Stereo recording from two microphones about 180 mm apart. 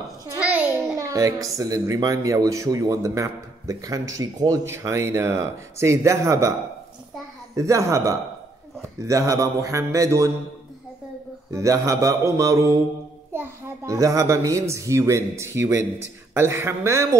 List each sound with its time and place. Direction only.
0.4 s a sound: 5° right (ahead or behind)
0.9 s speech: 20° right (ahead or behind)
7.5 s speech: 15° right (ahead or behind)
11.5 s speech: 15° right (ahead or behind)